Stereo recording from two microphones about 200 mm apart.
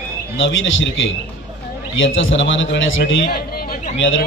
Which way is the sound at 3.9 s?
75° left (ahead or behind).